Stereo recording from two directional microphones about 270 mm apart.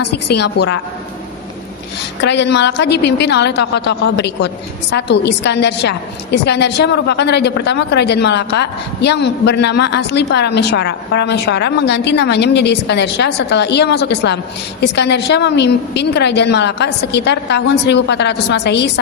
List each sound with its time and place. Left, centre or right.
0.0 s speech: left
2.2 s speech: left